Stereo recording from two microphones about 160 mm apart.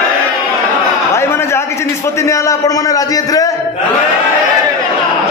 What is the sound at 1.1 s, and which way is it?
A man's voice, 15° left (ahead or behind).